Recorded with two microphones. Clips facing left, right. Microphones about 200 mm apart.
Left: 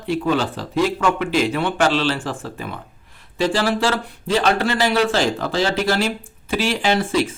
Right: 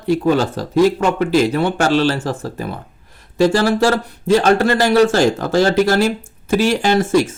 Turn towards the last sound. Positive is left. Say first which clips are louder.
# right 4 dB
turn(degrees=-45)  # may be behind; listen again after turning